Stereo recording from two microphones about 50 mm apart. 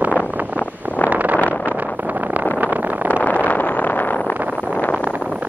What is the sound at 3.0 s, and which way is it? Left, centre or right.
Vehicle, left.